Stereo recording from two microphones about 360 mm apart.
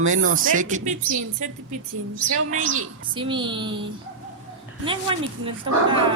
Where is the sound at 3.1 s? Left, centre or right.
Centre.